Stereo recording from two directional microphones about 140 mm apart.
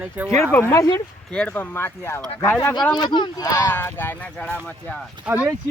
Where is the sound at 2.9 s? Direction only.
30° left (ahead or behind).